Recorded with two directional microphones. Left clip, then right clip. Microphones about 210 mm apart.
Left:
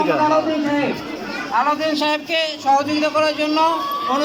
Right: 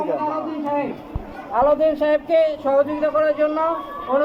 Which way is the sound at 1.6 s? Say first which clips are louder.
Right 2 dB; 15° right (ahead or behind).